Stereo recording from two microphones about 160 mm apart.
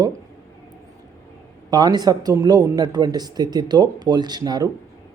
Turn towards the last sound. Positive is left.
turn(degrees=-25)  # may be behind; listen again after turning